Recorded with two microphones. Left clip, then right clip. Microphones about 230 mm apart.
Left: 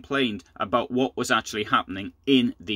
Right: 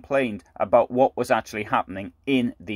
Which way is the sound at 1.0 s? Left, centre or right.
Centre.